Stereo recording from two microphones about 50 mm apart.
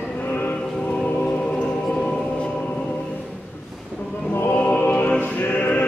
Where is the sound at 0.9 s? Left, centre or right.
Left.